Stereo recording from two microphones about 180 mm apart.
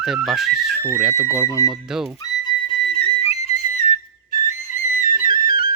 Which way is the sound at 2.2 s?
25° left (ahead or behind).